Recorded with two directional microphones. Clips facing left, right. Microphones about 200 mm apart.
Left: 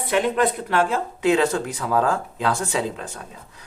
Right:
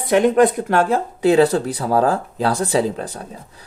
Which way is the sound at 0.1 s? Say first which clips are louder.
Right 7 dB; 45° right (ahead or behind).